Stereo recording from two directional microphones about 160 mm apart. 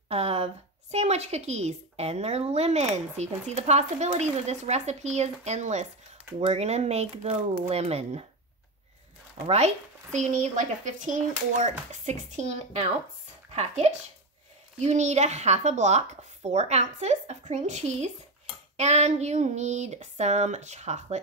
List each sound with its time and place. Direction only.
0.1 s a woman's voice: 40° right (ahead or behind)
9.5 s a woman's voice: 45° right (ahead or behind)